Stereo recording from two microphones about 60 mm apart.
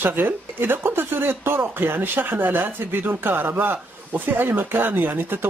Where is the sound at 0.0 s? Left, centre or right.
Right.